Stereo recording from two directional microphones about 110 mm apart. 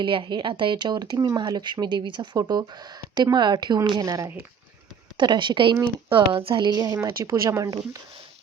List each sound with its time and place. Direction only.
0.0 s a woman's voice: 50° right (ahead or behind); by 7.8 s 30° right (ahead or behind)